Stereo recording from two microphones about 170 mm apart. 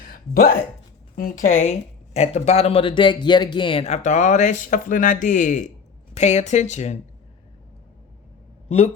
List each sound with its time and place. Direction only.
0.1 s speech: 60° left (ahead or behind); by 7.0 s 40° left (ahead or behind)